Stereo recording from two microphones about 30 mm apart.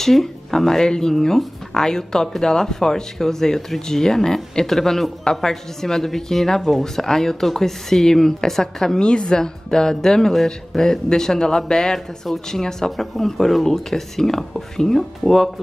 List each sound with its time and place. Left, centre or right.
0.0 s a man's voice: centre
10.3 s speech: centre
10.8 s a man's voice: left
12.9 s speech: centre